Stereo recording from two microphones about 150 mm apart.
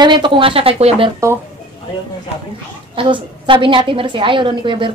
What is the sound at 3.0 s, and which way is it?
A woman's voice, 35° right (ahead or behind).